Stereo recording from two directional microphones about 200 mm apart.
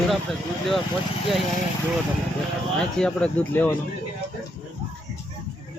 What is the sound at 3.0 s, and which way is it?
Speech, 5° left (ahead or behind).